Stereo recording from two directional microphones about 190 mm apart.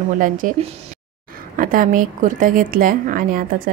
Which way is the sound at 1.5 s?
45° right (ahead or behind).